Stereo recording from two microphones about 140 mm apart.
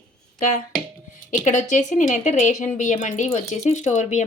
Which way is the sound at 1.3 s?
65° left (ahead or behind).